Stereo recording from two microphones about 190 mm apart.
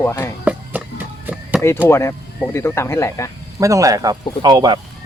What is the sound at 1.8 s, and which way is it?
Speech, 15° left (ahead or behind).